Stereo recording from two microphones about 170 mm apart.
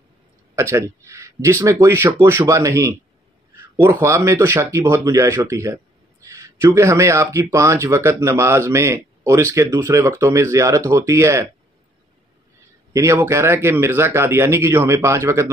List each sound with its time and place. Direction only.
0.6 s speech: 15° right (ahead or behind)
12.9 s speech: 15° right (ahead or behind)